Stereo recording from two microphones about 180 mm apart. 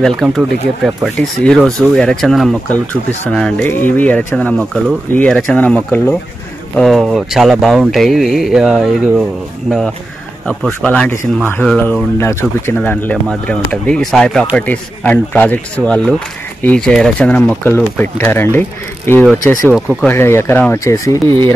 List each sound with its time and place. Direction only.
0.0 s speech: centre (ahead or behind); by 19.7 s 20° left (ahead or behind)
19.7 s speech: centre (ahead or behind)
20.1 s speech: 15° left (ahead or behind)